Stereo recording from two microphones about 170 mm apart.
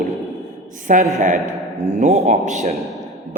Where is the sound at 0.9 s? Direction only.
50° right (ahead or behind).